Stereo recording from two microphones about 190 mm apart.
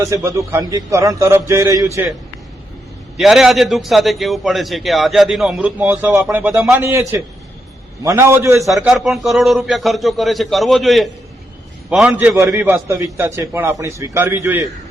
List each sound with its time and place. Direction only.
0.0 s a man's voice: 15° right (ahead or behind)
3.2 s a man's voice: centre (ahead or behind)
8.6 s a man's voice: centre (ahead or behind)